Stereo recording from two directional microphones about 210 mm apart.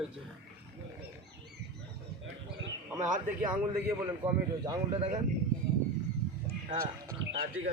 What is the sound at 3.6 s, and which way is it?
A man's voice, 10° right (ahead or behind).